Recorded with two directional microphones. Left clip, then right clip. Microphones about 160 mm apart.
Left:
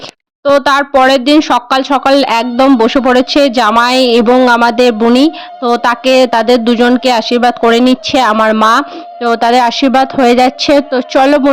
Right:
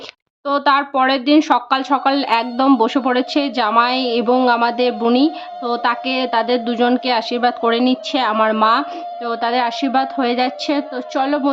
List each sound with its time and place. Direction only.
0.4 s a woman's voice: 35° left (ahead or behind)